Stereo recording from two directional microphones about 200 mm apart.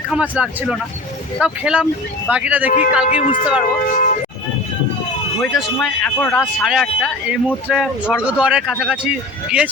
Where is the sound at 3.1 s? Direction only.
35° left (ahead or behind).